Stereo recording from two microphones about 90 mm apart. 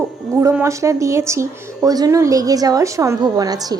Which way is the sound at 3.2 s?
45° right (ahead or behind).